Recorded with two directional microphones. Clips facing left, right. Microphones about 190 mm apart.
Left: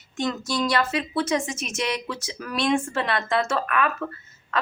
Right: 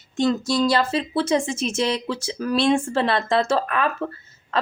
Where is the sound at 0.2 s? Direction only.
30° right (ahead or behind).